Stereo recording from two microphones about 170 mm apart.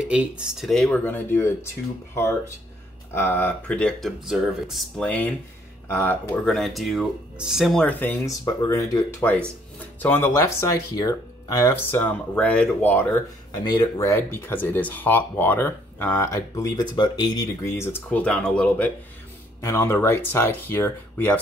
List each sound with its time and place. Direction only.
0.0 s speech: 5° right (ahead or behind); by 21.4 s 15° left (ahead or behind)